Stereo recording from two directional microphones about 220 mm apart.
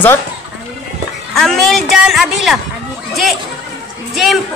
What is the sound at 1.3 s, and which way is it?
A woman's voice, centre (ahead or behind).